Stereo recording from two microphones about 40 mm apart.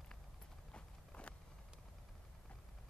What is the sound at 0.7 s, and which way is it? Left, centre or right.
Clip-clop, left.